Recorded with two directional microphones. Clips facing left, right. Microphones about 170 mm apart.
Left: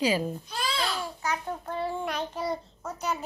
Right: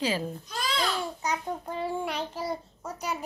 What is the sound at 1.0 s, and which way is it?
A child's voice, 20° right (ahead or behind).